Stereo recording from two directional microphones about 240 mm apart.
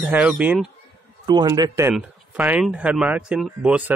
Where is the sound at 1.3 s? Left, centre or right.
Centre.